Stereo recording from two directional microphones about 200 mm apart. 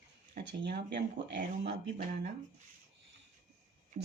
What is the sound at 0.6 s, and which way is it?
Speech, 45° right (ahead or behind).